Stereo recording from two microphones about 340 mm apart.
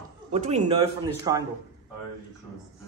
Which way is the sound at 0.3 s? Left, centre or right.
Centre.